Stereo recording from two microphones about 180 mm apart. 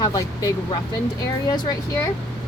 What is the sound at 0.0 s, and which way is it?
Speech, 20° left (ahead or behind).